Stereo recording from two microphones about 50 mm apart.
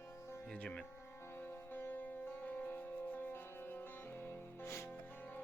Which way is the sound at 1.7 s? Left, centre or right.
Left.